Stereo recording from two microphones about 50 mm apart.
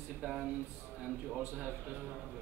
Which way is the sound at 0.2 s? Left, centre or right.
Centre.